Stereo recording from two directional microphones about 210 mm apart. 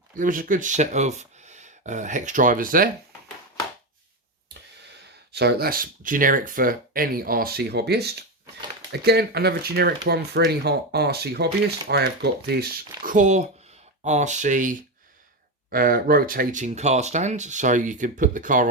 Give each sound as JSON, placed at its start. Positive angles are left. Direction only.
{"t": 0.2, "sound": "speech", "side_deg": -40}
{"t": 5.3, "sound": "speech", "side_deg": -50}